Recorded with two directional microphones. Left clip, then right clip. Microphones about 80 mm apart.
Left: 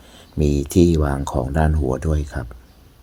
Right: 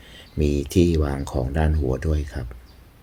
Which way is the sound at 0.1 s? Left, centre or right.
Left.